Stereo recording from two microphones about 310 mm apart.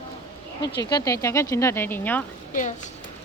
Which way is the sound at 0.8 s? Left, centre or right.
Centre.